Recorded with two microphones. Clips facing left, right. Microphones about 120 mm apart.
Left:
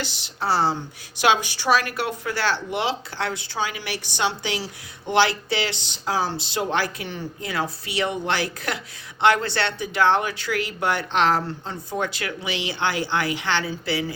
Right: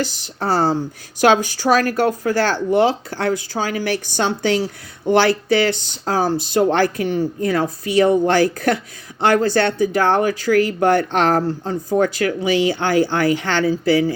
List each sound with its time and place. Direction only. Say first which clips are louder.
0.0 s speech: right 5 dB; 45° right (ahead or behind)